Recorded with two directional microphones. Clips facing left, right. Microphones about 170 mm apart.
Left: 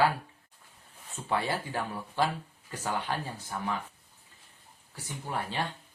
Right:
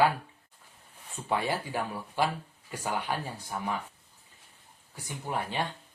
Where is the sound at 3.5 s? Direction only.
10° right (ahead or behind).